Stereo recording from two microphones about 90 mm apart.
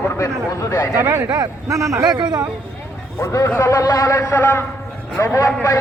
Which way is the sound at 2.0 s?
50° right (ahead or behind).